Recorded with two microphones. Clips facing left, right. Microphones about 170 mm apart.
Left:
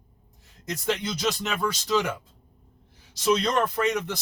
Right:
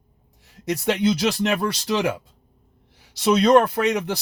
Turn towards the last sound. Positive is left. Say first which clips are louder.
# right 4 dB
turn(degrees=-75)  # may be behind; listen again after turning